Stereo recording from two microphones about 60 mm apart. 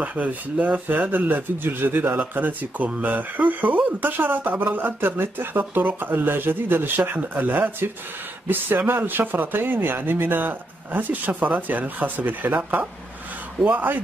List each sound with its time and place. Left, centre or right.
0.0 s speech: right